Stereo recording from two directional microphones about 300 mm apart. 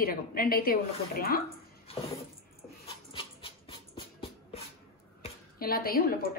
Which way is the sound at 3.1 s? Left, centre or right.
Centre.